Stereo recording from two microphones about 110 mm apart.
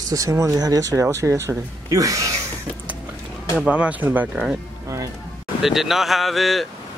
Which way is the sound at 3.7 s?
10° right (ahead or behind).